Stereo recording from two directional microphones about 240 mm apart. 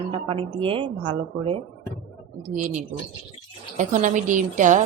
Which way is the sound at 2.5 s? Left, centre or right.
Right.